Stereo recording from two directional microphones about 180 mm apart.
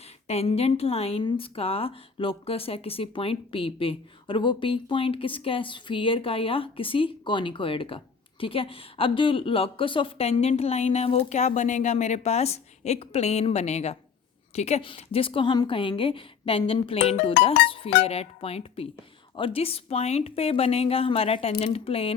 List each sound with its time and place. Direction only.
0.3 s a woman's voice: 35° left (ahead or behind)